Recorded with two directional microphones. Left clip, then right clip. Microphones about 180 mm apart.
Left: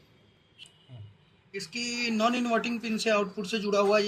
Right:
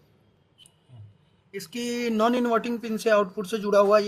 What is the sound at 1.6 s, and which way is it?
Speech, 50° right (ahead or behind).